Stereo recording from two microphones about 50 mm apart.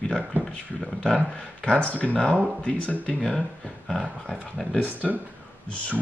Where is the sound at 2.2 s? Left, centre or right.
Right.